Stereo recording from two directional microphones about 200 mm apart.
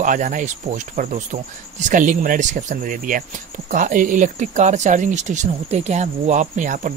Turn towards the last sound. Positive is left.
turn(degrees=-40)  # may be behind; listen again after turning